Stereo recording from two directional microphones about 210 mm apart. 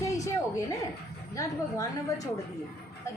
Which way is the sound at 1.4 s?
15° left (ahead or behind).